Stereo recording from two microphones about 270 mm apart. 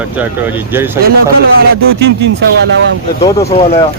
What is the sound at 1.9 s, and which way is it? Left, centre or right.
Speech, right.